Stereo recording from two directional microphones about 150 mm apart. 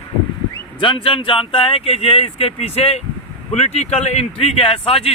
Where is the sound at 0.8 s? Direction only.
35° left (ahead or behind).